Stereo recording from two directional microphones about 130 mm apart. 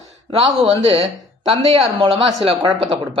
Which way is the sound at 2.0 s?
40° right (ahead or behind).